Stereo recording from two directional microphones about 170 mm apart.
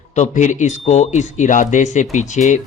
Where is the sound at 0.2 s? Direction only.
45° left (ahead or behind).